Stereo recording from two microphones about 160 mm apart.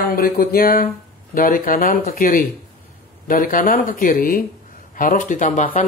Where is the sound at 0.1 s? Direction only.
65° left (ahead or behind).